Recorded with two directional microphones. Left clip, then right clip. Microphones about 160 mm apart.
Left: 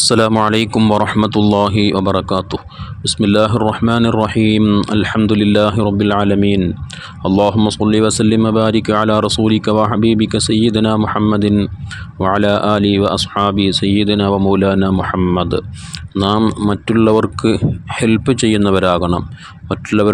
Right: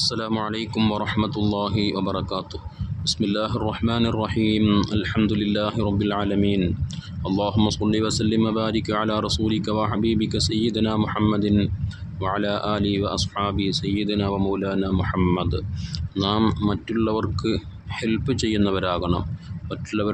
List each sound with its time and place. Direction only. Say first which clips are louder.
0.1 s speech: left 14 dB; 60° left (ahead or behind)
0.9 s speech: left 11 dB; 45° left (ahead or behind)
11.0 s speech: left 8 dB; 35° left (ahead or behind)
12.2 s speech: left 11 dB; 50° left (ahead or behind)
15.0 s speech: left 7 dB; 35° left (ahead or behind)
15.4 s speech: left 10 dB; 45° left (ahead or behind)
16.4 s speech: left 7 dB; 30° left (ahead or behind)
16.6 s speech: left 11 dB; 45° left (ahead or behind)